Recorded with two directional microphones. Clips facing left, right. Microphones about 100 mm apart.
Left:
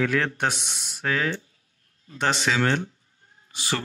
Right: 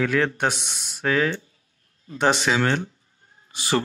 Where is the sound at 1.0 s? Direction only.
15° right (ahead or behind).